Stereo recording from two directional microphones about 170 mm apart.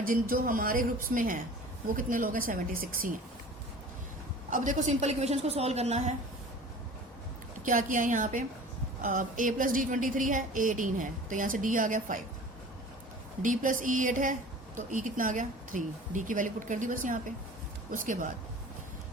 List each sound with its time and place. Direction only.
0.0 s a woman's voice: 55° right (ahead or behind)
4.5 s a woman's voice: 45° right (ahead or behind)
7.6 s a woman's voice: 50° right (ahead or behind)
13.4 s a woman's voice: 50° right (ahead or behind)